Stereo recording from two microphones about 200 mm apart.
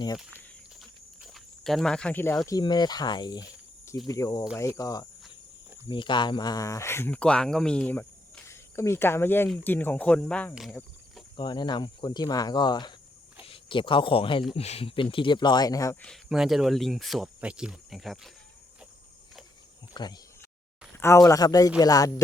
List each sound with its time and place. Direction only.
0.8 s a sound: centre (ahead or behind)
2.5 s speech: 20° left (ahead or behind); by 10.8 s centre (ahead or behind)
11.3 s speech: 20° left (ahead or behind)
16.0 s speech: centre (ahead or behind)
19.9 s speech: 20° left (ahead or behind)